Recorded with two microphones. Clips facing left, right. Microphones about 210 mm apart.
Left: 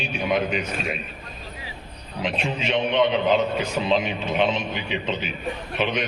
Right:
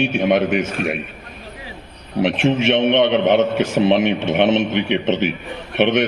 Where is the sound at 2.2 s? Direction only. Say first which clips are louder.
Right 9 dB; 75° right (ahead or behind).